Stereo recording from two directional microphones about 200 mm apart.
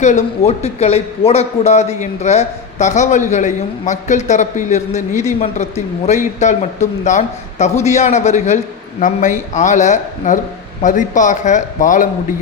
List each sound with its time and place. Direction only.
0.0 s a man's voice: 35° left (ahead or behind)